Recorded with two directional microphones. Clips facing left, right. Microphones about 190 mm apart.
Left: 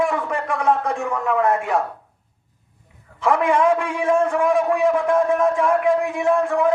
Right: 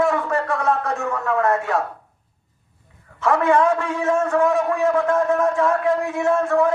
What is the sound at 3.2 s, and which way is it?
A man's voice, 15° left (ahead or behind).